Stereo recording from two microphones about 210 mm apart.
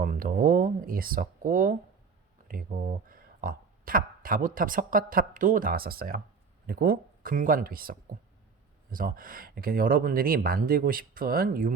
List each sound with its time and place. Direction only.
0.0 s speech: 40° right (ahead or behind)